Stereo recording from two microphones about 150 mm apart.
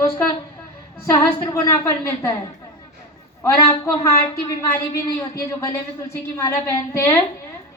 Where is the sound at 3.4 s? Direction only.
20° left (ahead or behind).